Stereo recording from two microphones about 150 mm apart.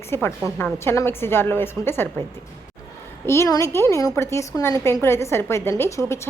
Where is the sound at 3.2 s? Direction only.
15° left (ahead or behind).